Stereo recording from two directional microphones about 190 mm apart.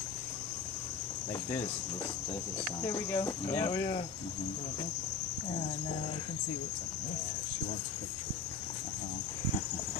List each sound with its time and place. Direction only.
2.8 s cricket: 15° left (ahead or behind)